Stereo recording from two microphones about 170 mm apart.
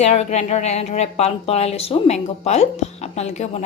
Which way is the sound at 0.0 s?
40° left (ahead or behind).